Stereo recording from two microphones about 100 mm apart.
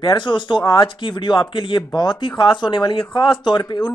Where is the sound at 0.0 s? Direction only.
55° left (ahead or behind).